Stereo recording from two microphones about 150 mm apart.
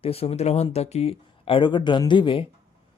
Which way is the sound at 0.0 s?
40° left (ahead or behind).